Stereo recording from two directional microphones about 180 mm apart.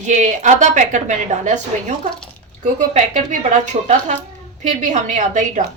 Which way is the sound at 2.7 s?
40° right (ahead or behind).